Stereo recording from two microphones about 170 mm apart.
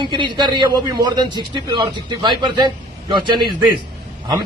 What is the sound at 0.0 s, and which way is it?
A man's voice, 30° right (ahead or behind).